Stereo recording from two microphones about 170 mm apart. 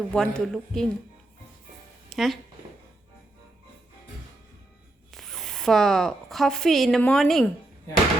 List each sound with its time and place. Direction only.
0.1 s a man's voice: 5° left (ahead or behind)
2.0 s speech: centre (ahead or behind)
5.1 s speech: centre (ahead or behind)